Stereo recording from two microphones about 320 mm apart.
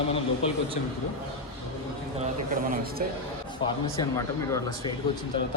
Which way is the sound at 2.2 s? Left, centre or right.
Right.